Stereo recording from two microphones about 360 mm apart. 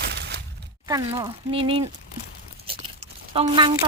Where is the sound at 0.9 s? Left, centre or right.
Centre.